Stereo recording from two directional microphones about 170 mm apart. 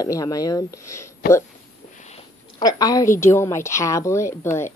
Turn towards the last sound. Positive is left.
turn(degrees=15)  # may be behind; listen again after turning